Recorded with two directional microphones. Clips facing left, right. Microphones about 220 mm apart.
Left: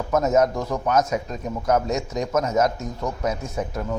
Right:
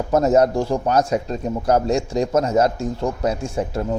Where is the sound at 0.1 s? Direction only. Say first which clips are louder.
Right 4 dB; 35° right (ahead or behind).